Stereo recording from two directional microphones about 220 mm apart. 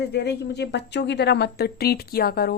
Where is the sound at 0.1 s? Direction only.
50° left (ahead or behind).